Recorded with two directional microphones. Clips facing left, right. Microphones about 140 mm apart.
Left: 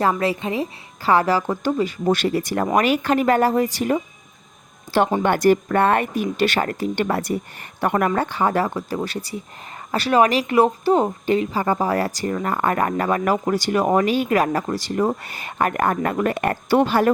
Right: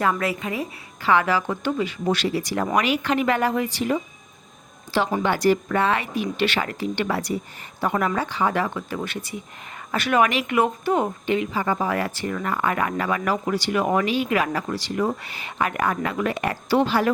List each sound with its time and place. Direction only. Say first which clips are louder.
0.0 s a woman's voice: left 3 dB; 30° left (ahead or behind)
5.2 s a woman's voice: left 3 dB; 55° left (ahead or behind)